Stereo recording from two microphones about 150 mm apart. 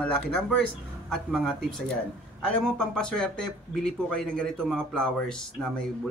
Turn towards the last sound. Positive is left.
turn(degrees=5)  # may be behind; listen again after turning